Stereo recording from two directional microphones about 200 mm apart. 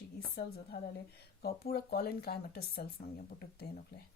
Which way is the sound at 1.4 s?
50° left (ahead or behind).